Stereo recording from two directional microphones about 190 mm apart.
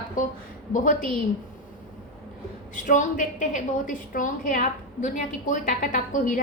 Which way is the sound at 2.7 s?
40° left (ahead or behind).